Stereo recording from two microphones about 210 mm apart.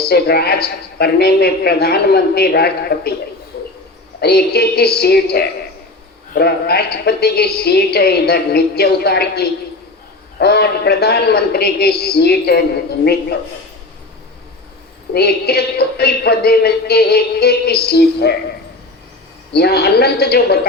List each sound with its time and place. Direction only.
0.1 s a woman's voice: 50° left (ahead or behind)
4.2 s a woman's voice: 50° left (ahead or behind)
15.1 s a woman's voice: 50° left (ahead or behind)
19.5 s a woman's voice: 50° left (ahead or behind)